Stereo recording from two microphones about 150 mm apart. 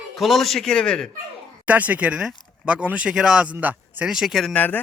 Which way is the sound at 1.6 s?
10° right (ahead or behind).